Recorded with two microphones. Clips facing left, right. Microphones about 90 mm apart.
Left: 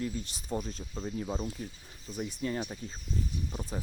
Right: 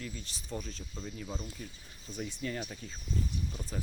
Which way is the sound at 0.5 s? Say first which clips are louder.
Left 5 dB; 30° left (ahead or behind).